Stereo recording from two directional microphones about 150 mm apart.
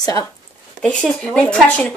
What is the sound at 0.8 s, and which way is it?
Speech, 5° left (ahead or behind).